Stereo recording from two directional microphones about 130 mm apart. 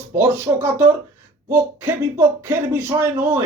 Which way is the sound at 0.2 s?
20° right (ahead or behind).